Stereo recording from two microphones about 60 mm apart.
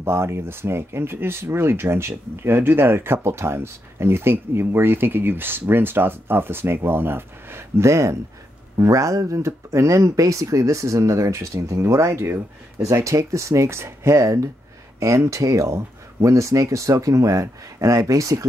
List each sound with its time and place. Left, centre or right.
0.0 s speech: right
8.7 s speech: right